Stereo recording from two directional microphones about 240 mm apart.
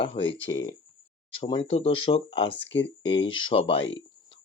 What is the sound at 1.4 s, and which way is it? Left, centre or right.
Speech, left.